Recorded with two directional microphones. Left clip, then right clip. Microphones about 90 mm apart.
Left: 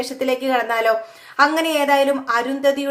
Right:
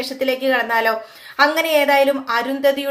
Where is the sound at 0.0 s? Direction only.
35° left (ahead or behind).